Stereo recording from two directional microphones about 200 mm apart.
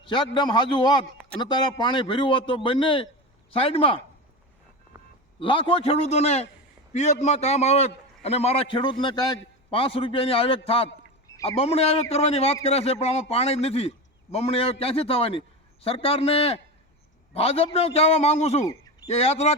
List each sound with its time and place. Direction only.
0.0 s a man's voice: 25° left (ahead or behind)
5.4 s a man's voice: 25° left (ahead or behind)